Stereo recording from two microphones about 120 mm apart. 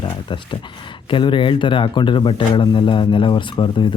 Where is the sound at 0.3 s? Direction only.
40° left (ahead or behind).